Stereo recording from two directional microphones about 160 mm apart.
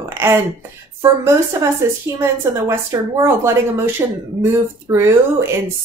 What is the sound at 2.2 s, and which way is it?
Speech, 15° right (ahead or behind).